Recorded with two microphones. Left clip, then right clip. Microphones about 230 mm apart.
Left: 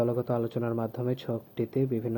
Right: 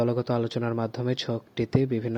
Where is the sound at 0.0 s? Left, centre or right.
Right.